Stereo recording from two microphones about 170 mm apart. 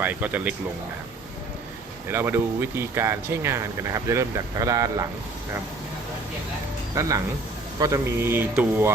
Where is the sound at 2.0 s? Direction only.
15° right (ahead or behind).